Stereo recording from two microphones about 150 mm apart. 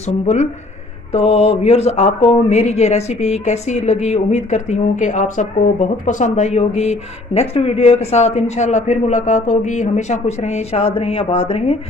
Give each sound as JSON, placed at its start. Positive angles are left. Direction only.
{"t": 1.1, "sound": "speech", "side_deg": 45}